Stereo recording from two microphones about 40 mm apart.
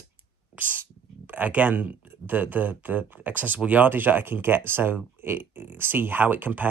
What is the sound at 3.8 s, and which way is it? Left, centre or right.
Speech, right.